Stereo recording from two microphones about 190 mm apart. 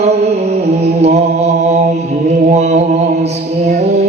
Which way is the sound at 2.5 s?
35° right (ahead or behind).